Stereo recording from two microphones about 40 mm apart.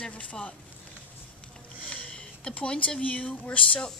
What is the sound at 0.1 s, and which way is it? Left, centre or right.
Speech, left.